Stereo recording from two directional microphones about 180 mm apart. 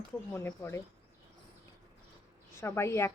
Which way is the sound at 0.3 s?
15° left (ahead or behind).